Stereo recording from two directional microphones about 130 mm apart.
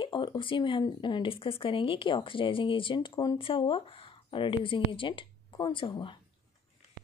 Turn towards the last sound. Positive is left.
turn(degrees=40)  # may be behind; listen again after turning